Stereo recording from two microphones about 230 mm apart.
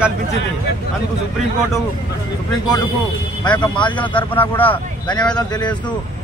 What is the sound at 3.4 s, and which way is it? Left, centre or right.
Speech, centre.